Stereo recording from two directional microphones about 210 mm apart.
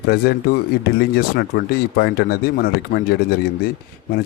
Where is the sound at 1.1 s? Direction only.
50° left (ahead or behind).